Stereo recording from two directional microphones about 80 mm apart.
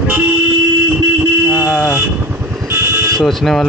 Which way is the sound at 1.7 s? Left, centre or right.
Centre.